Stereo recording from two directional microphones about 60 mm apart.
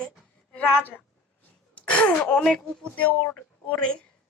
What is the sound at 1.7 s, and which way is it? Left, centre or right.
Speech, centre.